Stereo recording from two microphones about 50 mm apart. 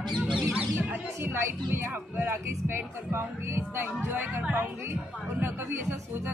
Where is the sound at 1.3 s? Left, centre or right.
Right.